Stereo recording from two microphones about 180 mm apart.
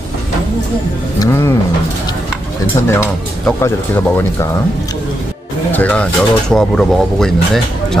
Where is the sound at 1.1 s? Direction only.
20° left (ahead or behind).